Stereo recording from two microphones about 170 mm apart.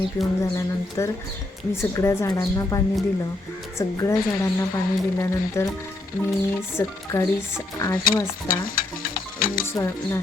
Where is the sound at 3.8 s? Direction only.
20° left (ahead or behind).